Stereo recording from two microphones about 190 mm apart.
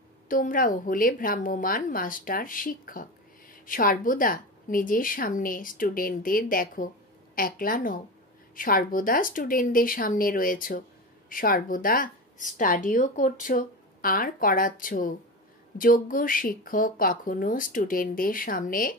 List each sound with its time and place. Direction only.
0.3 s a woman's voice: 45° left (ahead or behind)